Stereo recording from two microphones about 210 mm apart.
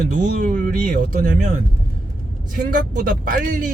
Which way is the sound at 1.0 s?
40° right (ahead or behind).